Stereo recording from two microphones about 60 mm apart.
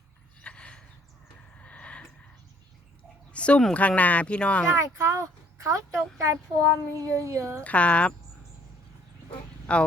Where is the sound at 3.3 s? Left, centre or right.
Centre.